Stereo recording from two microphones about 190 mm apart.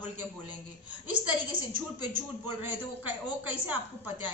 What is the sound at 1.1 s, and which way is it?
Speech, 25° right (ahead or behind).